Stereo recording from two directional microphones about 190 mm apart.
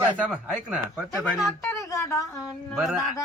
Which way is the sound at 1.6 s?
15° left (ahead or behind).